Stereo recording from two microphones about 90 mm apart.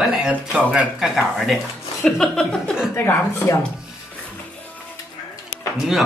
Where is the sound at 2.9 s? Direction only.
30° left (ahead or behind).